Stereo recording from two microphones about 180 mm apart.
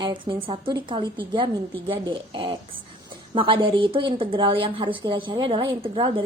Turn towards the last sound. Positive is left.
turn(degrees=-25)  # may be behind; listen again after turning